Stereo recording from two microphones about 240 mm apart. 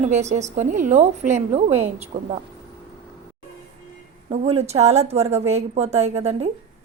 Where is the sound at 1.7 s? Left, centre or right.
Centre.